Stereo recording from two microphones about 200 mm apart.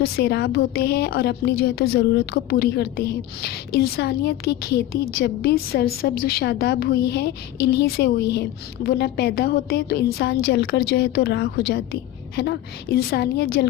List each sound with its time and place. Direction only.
0.0 s a woman's voice: 55° left (ahead or behind)